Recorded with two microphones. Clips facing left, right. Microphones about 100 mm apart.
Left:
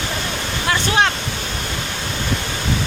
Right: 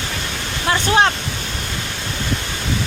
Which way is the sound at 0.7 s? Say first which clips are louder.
Right 2 dB; 30° right (ahead or behind).